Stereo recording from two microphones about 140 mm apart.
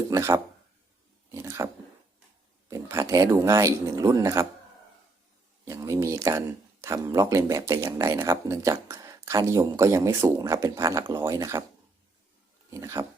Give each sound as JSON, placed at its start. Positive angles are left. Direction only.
{"t": 0.1, "sound": "speech", "side_deg": -20}
{"t": 5.6, "sound": "speech", "side_deg": -20}
{"t": 12.7, "sound": "speech", "side_deg": -20}